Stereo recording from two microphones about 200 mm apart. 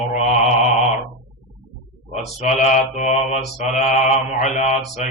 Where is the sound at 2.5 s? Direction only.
35° left (ahead or behind).